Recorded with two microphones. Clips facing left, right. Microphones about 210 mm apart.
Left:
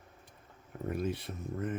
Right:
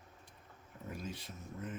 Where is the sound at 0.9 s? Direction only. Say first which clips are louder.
Left 10 dB; 60° left (ahead or behind).